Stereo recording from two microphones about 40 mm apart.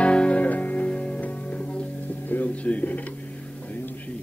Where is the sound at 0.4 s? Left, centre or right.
Left.